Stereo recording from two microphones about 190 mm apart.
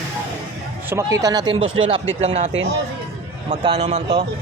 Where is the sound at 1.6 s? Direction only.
90° right.